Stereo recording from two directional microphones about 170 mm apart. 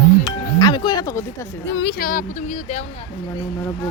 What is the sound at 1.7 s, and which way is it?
Speech, 80° left.